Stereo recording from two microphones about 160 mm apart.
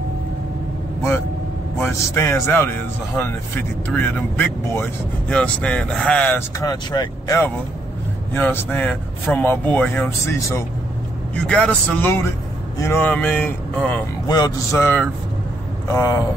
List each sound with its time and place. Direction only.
1.8 s speech: 15° left (ahead or behind)
3.8 s speech: 10° left (ahead or behind)
6.6 s speech: 25° left (ahead or behind)
8.3 s speech: 15° left (ahead or behind)
14.2 s a man's voice: 25° left (ahead or behind)
14.8 s speech: 10° left (ahead or behind)